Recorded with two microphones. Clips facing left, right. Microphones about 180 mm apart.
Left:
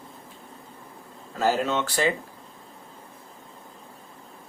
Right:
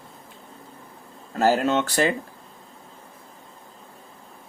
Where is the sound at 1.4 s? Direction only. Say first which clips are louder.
Right 4 dB; 60° right (ahead or behind).